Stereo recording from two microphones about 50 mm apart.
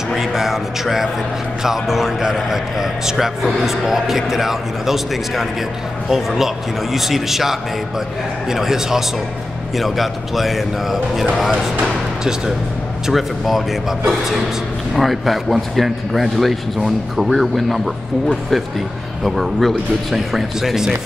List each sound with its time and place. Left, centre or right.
0.1 s music: centre
1.6 s a man's voice: centre
13.0 s a man's voice: centre
15.0 s a man's voice: centre